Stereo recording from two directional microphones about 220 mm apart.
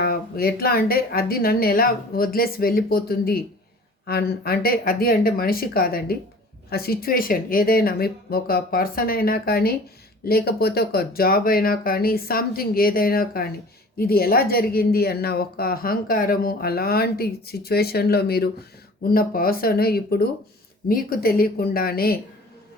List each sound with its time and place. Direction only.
0.0 s a woman's voice: 45° left (ahead or behind)